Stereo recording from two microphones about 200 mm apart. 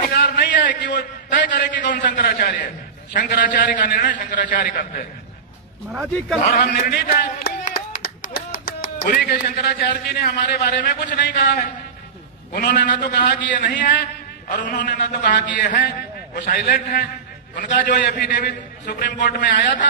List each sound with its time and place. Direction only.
0.0 s a sound: 50° left (ahead or behind)
1.5 s a man's voice: 45° left (ahead or behind)
5.9 s a man's voice: centre (ahead or behind)
6.6 s clapping: 45° left (ahead or behind)
9.6 s a man's voice: 55° left (ahead or behind)